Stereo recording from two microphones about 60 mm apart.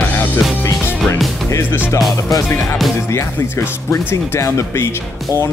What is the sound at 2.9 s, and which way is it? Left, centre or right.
Speech, left.